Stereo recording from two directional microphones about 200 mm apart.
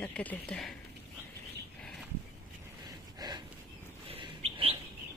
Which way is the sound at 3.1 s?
20° right (ahead or behind).